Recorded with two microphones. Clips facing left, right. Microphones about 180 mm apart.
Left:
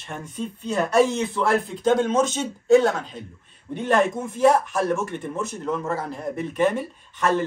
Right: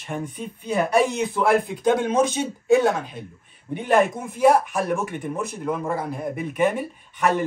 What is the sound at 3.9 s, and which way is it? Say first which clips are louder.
A man's voice: right 1 dB; 10° right (ahead or behind).